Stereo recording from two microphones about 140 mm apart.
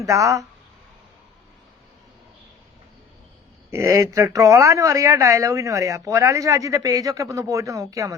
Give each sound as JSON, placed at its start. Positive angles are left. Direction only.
{"t": 0.0, "sound": "speech", "side_deg": -20}
{"t": 3.7, "sound": "speech", "side_deg": -20}